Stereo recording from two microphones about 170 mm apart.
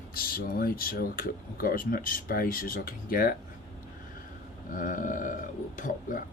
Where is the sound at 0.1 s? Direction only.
60° left (ahead or behind).